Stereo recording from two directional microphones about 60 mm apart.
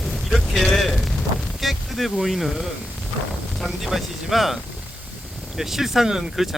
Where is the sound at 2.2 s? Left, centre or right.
Centre.